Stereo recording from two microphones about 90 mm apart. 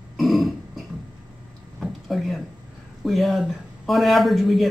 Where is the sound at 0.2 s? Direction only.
Centre (ahead or behind).